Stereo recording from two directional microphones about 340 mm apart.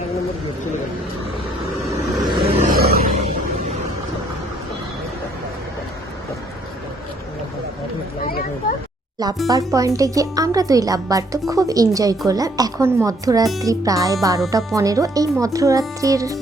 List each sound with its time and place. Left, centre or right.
1.9 s vehicle: centre
2.4 s a sound: right
9.5 s speech: centre